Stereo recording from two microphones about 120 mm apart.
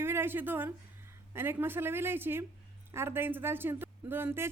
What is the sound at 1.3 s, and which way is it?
A woman's voice, 20° right (ahead or behind).